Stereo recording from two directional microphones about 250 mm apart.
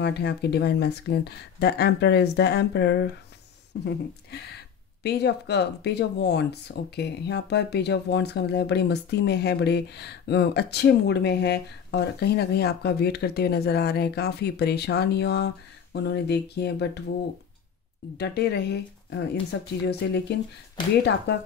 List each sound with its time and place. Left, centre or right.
0.0 s speech: left
5.0 s speech: left
18.1 s speech: left